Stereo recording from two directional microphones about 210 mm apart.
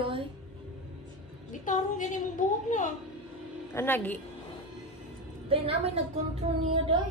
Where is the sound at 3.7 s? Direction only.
10° left (ahead or behind).